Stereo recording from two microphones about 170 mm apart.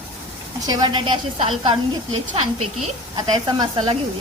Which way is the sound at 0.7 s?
25° right (ahead or behind).